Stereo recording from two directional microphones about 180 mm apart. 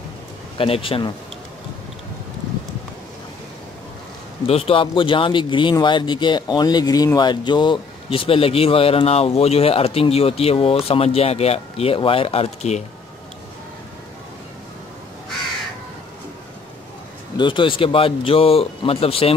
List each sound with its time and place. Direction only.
0.6 s speech: 30° left (ahead or behind)
4.5 s speech: 30° left (ahead or behind)
17.4 s speech: 25° left (ahead or behind)